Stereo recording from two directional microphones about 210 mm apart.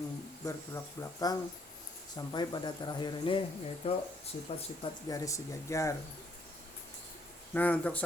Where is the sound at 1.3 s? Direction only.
15° left (ahead or behind).